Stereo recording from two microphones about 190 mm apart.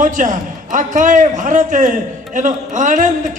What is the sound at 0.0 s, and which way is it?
A man's voice, 40° right (ahead or behind).